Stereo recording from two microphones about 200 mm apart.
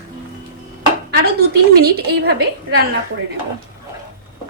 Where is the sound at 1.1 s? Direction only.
50° right (ahead or behind).